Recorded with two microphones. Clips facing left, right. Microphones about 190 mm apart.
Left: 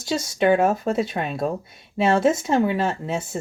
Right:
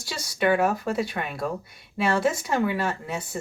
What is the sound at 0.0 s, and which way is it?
Speech, 25° left (ahead or behind).